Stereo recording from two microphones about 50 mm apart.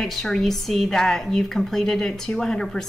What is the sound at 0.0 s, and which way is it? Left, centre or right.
A woman's voice, centre.